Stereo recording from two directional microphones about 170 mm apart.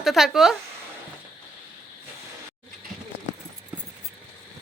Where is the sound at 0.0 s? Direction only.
Centre (ahead or behind).